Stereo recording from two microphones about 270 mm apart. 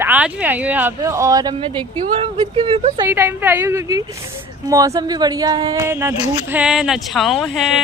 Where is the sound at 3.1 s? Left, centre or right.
Centre.